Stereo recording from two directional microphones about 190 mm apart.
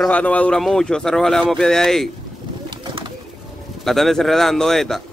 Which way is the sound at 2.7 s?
25° right (ahead or behind).